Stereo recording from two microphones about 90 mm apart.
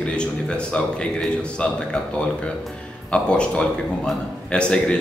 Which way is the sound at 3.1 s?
10° left (ahead or behind).